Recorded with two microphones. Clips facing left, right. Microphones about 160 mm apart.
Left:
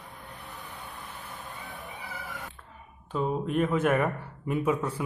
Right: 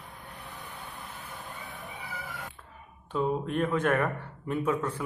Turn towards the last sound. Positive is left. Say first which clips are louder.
# left 1 dB
turn(degrees=10)  # may be behind; listen again after turning